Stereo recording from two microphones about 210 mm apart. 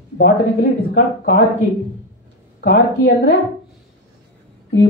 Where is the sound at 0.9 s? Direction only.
50° left (ahead or behind).